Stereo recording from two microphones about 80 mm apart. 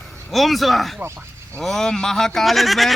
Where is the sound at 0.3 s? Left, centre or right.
Centre.